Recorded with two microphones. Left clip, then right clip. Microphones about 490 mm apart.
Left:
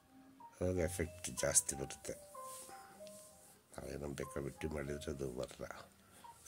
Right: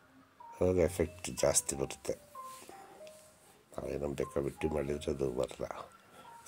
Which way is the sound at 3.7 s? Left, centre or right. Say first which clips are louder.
Right 9 dB; left.